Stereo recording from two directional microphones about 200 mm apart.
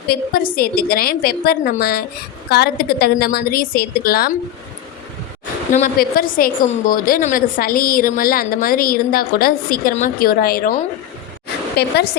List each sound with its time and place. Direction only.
0.1 s a woman's voice: 45° left (ahead or behind)
5.7 s a woman's voice: 45° left (ahead or behind)
11.8 s a woman's voice: 55° left (ahead or behind)